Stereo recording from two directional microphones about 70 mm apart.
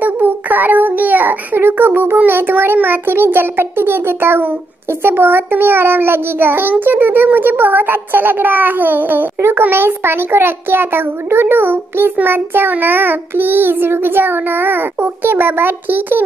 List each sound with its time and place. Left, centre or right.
0.0 s a child's voice: right
12.5 s child singing: right